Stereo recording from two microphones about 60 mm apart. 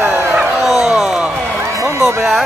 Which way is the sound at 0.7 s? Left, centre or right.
Centre.